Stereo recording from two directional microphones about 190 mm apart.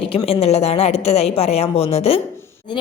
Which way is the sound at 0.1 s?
30° left (ahead or behind).